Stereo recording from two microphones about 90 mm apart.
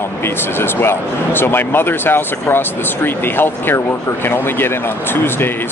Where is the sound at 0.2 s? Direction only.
25° left (ahead or behind).